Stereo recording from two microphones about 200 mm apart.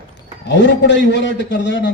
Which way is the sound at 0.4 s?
60° left (ahead or behind).